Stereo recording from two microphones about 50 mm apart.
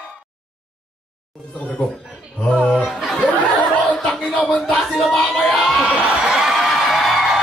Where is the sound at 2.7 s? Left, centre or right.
Centre.